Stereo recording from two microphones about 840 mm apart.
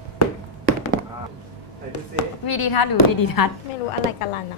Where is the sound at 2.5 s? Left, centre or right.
Left.